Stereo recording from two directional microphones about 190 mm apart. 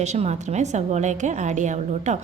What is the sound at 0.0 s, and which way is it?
A woman's voice, 35° right (ahead or behind).